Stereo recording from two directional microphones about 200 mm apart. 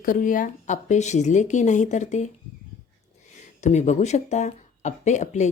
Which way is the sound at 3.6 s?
35° left (ahead or behind).